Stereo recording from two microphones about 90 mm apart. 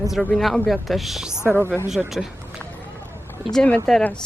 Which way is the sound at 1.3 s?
25° left (ahead or behind).